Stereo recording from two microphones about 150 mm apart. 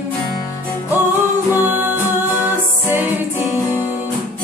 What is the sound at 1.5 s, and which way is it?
Music, 15° right (ahead or behind).